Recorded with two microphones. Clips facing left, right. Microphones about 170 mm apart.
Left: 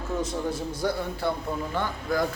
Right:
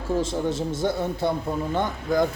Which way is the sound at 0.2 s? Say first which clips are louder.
Right 4 dB; 25° right (ahead or behind).